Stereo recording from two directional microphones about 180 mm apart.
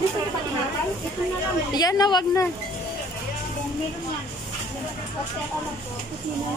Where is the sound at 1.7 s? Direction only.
20° left (ahead or behind).